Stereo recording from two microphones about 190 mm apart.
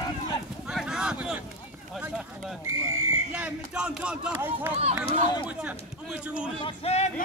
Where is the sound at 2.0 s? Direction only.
5° right (ahead or behind).